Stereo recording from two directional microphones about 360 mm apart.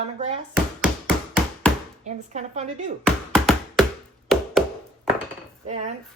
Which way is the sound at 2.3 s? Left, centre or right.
Centre.